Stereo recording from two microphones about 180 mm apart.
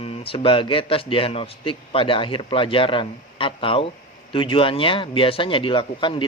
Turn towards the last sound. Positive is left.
turn(degrees=25)  # may be behind; listen again after turning